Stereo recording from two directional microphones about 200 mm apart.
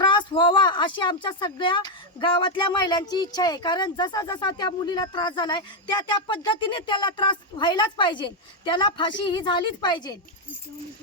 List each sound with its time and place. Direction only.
0.0 s speech: 25° left (ahead or behind)